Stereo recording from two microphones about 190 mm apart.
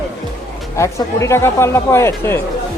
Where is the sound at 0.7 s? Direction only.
15° left (ahead or behind).